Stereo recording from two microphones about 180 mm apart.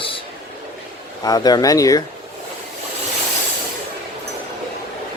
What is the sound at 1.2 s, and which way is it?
Speech, 20° left (ahead or behind).